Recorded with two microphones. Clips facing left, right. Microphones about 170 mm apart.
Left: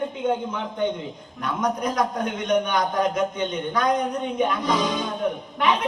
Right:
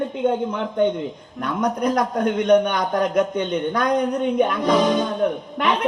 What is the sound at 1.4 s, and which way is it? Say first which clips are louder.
A man's voice: right 3 dB; 60° right (ahead or behind).